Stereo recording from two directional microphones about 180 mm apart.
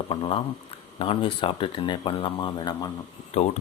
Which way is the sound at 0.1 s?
30° left (ahead or behind).